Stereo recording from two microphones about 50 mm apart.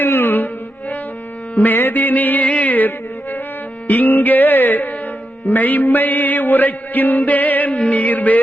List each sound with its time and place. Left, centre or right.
0.0 s music: left
1.5 s mantra: left